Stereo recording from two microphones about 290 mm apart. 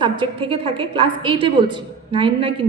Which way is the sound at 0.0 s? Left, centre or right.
Centre.